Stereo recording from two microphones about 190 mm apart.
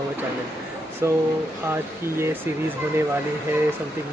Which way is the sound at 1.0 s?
15° right (ahead or behind).